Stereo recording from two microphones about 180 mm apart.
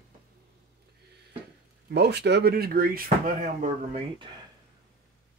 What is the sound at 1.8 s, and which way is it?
Speech, 65° right (ahead or behind).